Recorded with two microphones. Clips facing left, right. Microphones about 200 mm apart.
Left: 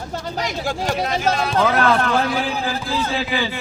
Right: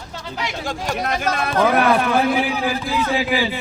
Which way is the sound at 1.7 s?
15° right (ahead or behind).